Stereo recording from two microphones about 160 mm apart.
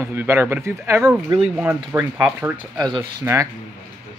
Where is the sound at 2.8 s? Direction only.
25° right (ahead or behind).